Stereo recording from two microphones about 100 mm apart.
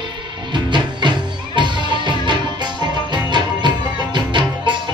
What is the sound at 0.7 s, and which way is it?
Music, 50° right (ahead or behind).